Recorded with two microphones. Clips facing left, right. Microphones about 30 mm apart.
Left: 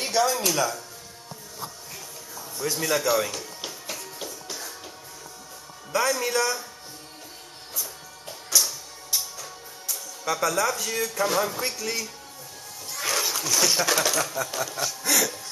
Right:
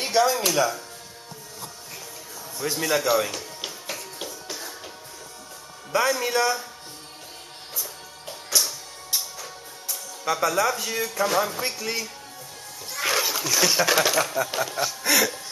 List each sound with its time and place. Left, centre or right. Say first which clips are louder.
0.0 s speech: right 2 dB; centre
2.6 s music: right 1 dB; centre
5.9 s speech: right 2 dB; centre
8.3 s music: even; centre
12.9 s speech: right 3 dB; centre